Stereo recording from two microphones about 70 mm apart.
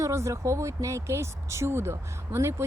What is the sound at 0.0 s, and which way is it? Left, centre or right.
Speech, right.